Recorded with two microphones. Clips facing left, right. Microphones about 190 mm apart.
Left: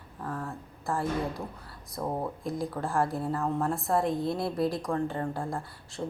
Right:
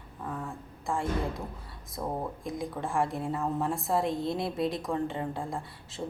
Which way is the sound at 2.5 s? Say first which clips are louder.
Left 2 dB; centre (ahead or behind).